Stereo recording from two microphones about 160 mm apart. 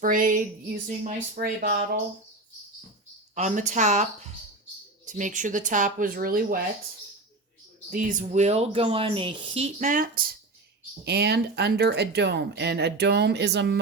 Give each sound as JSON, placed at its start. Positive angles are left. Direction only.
{"t": 0.0, "sound": "a woman's voice", "side_deg": -60}
{"t": 3.3, "sound": "speech", "side_deg": -50}
{"t": 7.9, "sound": "speech", "side_deg": -55}
{"t": 9.9, "sound": "a woman's voice", "side_deg": -60}
{"t": 11.0, "sound": "speech", "side_deg": -90}